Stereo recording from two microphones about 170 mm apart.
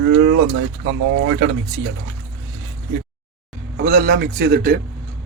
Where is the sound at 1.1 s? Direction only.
90° right.